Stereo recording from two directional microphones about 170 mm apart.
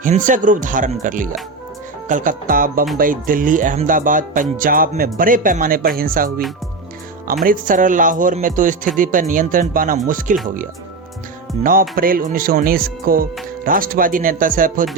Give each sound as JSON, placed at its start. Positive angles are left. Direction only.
{"t": 0.0, "sound": "speech", "side_deg": -50}
{"t": 7.4, "sound": "speech", "side_deg": -50}
{"t": 11.6, "sound": "speech", "side_deg": -55}